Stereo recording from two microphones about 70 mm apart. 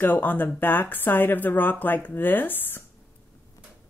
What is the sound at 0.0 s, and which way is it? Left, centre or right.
Speech, left.